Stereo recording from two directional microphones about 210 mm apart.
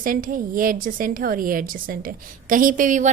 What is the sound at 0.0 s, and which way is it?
A woman's voice, 40° right (ahead or behind).